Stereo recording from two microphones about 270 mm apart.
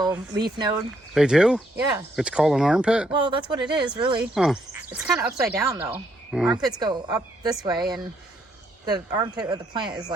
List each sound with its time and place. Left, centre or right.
0.0 s speech: centre
1.1 s speech: centre
3.1 s speech: centre
4.2 s speech: centre
6.7 s speech: centre